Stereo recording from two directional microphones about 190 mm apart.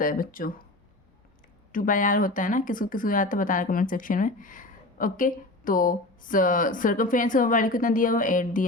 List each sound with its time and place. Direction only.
0.0 s speech: 45° left (ahead or behind)
1.7 s speech: 45° left (ahead or behind)